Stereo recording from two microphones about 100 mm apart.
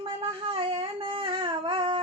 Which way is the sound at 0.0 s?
65° right (ahead or behind).